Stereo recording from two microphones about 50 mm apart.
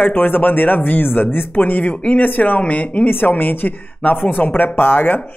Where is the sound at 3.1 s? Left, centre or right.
Left.